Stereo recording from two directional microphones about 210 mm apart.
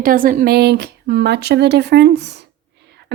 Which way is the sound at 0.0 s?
40° right (ahead or behind).